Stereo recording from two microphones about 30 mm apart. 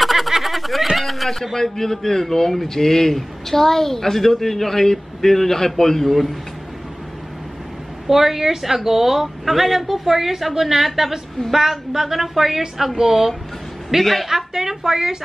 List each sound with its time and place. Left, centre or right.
0.0 s snicker: centre
0.9 s speech: centre
8.1 s a woman's voice: centre